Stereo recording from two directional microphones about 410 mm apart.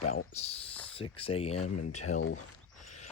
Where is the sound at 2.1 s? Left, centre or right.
Left.